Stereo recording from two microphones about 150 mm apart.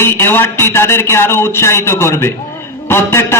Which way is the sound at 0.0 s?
15° left (ahead or behind).